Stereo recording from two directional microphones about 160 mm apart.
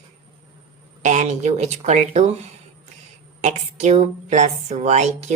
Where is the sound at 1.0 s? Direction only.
45° right (ahead or behind).